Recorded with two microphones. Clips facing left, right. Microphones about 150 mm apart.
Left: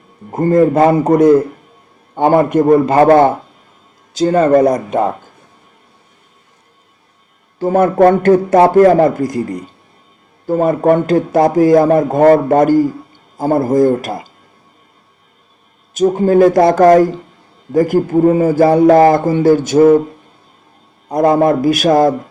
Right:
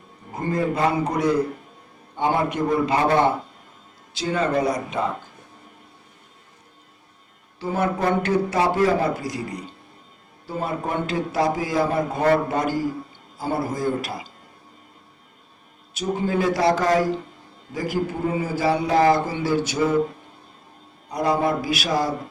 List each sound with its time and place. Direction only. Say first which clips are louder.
0.3 s a man's voice: left 13 dB; 50° left (ahead or behind)
7.6 s a man's voice: left 13 dB; 50° left (ahead or behind)
16.0 s a man's voice: left 13 dB; 50° left (ahead or behind)
21.1 s a man's voice: left 10 dB; 50° left (ahead or behind)